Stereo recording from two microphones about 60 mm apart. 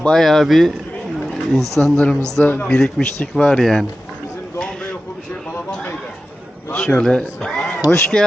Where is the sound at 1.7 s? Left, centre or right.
Centre.